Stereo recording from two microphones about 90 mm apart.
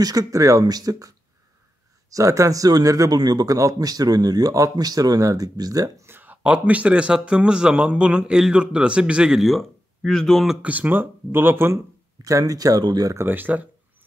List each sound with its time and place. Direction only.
0.0 s speech: 40° right (ahead or behind)
6.0 s speech: 20° right (ahead or behind); by 10.5 s 5° left (ahead or behind)
10.5 s speech: 15° right (ahead or behind)
12.2 s speech: 40° right (ahead or behind)
13.1 s speech: 25° right (ahead or behind)